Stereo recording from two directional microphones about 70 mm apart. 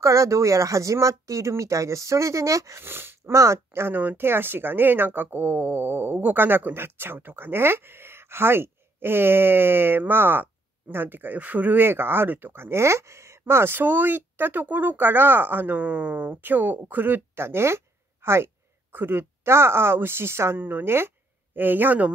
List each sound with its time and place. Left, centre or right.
0.0 s speech: right
2.8 s speech: right
3.3 s speech: right
3.9 s speech: right